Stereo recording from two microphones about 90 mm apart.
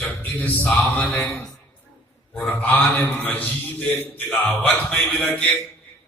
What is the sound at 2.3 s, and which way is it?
A man's voice, 15° left (ahead or behind).